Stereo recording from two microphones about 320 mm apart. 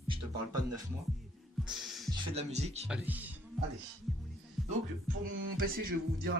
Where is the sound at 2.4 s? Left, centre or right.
Centre.